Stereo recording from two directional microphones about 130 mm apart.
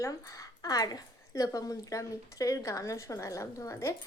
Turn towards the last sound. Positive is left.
turn(degrees=25)  # may be behind; listen again after turning